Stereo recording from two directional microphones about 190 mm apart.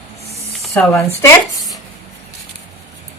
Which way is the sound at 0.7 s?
15° left (ahead or behind).